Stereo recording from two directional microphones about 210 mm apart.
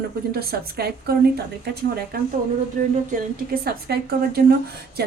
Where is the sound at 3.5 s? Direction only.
45° right (ahead or behind).